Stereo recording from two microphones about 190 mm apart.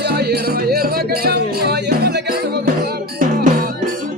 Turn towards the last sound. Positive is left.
turn(degrees=-50)  # may be behind; listen again after turning